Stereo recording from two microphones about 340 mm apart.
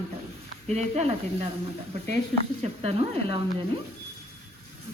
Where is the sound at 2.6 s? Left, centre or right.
Centre.